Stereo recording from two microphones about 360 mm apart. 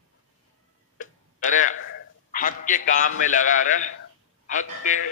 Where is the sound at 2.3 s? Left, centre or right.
Left.